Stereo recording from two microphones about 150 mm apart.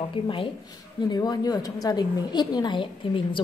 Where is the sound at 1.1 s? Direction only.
25° left (ahead or behind).